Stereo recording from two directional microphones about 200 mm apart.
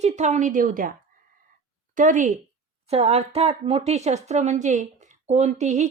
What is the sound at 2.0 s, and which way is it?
Speech, 40° right (ahead or behind).